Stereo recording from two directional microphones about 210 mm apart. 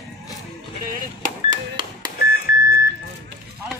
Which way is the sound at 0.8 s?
40° right (ahead or behind).